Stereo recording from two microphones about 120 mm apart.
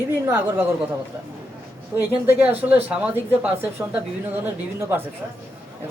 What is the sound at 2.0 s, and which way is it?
Speech, 15° right (ahead or behind).